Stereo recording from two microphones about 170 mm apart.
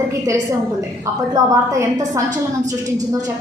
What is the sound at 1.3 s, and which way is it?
Speech, 20° right (ahead or behind).